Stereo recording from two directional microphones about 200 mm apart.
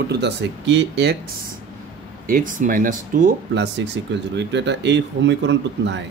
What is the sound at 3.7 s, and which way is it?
Speech, 60° right (ahead or behind).